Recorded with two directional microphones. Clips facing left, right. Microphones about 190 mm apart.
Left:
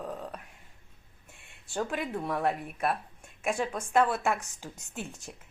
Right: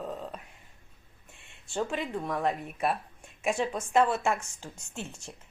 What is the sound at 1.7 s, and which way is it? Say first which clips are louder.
A woman's voice: right 1 dB; 5° left (ahead or behind).